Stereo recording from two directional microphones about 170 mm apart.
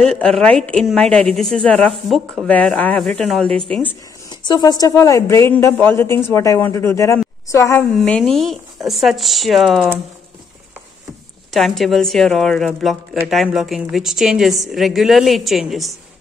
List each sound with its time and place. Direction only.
0.0 s speech: 5° left (ahead or behind)
4.5 s a woman's voice: 25° left (ahead or behind)
7.9 s speech: 5° left (ahead or behind)
11.5 s speech: centre (ahead or behind)